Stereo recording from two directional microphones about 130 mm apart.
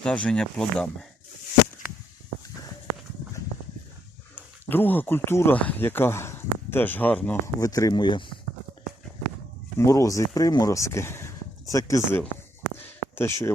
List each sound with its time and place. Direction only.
0.0 s speech: 5° left (ahead or behind)
4.7 s speech: 15° left (ahead or behind)
7.6 s speech: 25° left (ahead or behind)
9.7 s speech: 25° left (ahead or behind)
12.7 s a sound: 20° left (ahead or behind)